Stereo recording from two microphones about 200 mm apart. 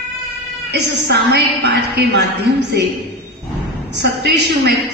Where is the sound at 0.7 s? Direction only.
60° right (ahead or behind).